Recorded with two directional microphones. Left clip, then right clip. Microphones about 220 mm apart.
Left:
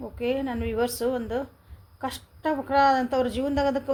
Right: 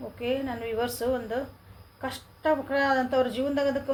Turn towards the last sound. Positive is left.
turn(degrees=45)  # may be behind; listen again after turning